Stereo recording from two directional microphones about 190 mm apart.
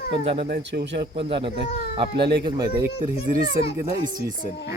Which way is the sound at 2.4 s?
25° right (ahead or behind).